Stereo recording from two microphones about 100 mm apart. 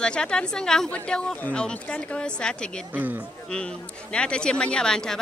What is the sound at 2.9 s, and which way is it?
Speech, 15° right (ahead or behind).